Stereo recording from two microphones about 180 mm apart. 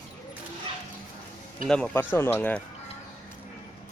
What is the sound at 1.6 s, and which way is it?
Speech, 5° left (ahead or behind).